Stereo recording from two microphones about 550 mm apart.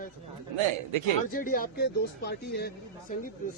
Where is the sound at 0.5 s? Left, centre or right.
Right.